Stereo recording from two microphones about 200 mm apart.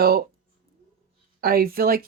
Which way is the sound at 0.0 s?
50° right (ahead or behind).